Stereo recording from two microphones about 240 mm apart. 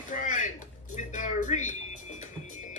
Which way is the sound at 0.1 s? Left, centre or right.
Left.